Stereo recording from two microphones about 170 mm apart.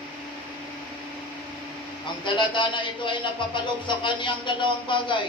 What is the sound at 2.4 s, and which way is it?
A man's voice, 30° left (ahead or behind).